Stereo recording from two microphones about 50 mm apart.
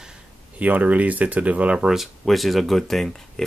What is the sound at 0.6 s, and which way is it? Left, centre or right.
Speech, right.